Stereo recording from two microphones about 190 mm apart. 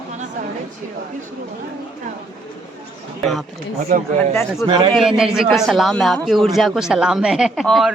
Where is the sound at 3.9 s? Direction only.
45° right (ahead or behind).